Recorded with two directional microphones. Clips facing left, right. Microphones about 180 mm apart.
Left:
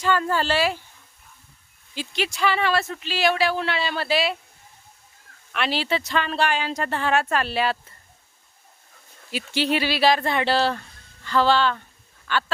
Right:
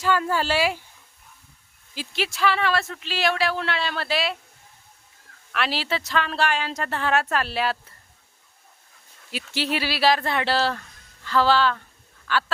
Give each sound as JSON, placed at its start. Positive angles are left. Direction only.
{"t": 0.0, "sound": "speech", "side_deg": -5}
{"t": 2.0, "sound": "speech", "side_deg": 0}
{"t": 5.5, "sound": "speech", "side_deg": 0}
{"t": 9.3, "sound": "speech", "side_deg": 0}
{"t": 12.3, "sound": "a sound", "side_deg": 0}